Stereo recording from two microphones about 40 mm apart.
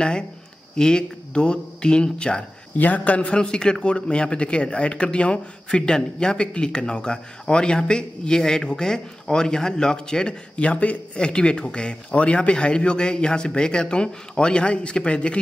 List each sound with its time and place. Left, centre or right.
0.7 s speech: left
2.8 s a man's voice: left
3.3 s speech: left